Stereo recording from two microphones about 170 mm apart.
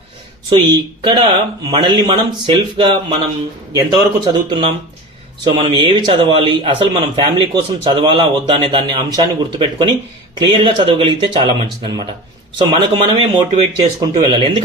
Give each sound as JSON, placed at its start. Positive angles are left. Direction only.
{"t": 0.5, "sound": "speech", "side_deg": -25}
{"t": 12.5, "sound": "speech", "side_deg": -30}